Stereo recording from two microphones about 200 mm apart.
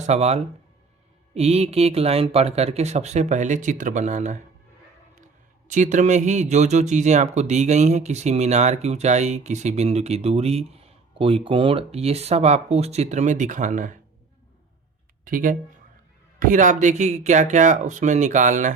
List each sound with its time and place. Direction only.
0.0 s speech: 35° right (ahead or behind)
15.2 s speech: 45° right (ahead or behind)